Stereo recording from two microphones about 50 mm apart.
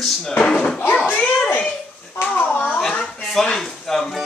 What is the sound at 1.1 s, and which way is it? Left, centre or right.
A child's voice, left.